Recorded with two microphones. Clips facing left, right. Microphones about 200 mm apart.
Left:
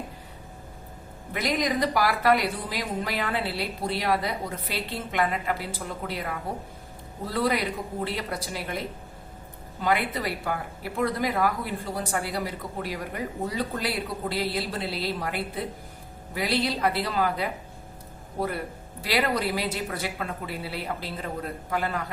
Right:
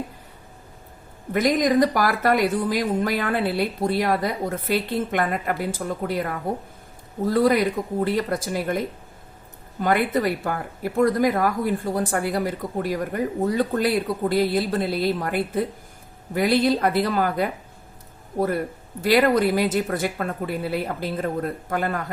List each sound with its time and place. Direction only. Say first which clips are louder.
1.3 s speech: right 7 dB; 45° right (ahead or behind)
7.3 s speech: right 7 dB; 45° right (ahead or behind)
9.8 s speech: right 6 dB; 50° right (ahead or behind)